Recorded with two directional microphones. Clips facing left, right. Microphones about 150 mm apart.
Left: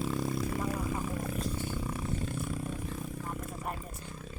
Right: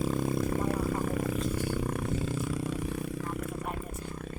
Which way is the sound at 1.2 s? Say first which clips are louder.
Right 4 dB; 80° right.